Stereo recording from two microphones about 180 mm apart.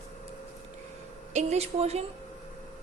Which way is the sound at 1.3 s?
40° right (ahead or behind).